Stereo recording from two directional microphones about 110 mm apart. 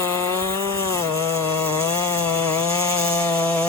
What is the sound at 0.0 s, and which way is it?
Chainsaw, 25° left (ahead or behind).